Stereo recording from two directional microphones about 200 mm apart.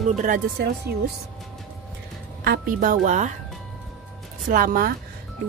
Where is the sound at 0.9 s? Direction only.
55° right (ahead or behind).